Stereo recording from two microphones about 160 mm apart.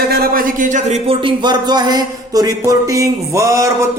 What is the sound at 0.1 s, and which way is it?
Speech, 60° right (ahead or behind).